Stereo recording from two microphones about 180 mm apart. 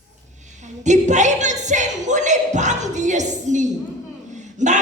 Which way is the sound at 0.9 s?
40° right (ahead or behind).